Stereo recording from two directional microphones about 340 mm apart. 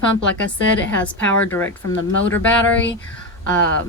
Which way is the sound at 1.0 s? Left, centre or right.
Centre.